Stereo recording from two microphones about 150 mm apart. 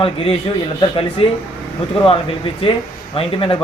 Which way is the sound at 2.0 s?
40° left (ahead or behind).